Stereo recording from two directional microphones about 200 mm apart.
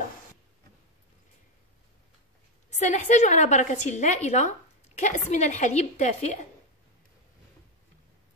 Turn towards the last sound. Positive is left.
turn(degrees=35)  # may be behind; listen again after turning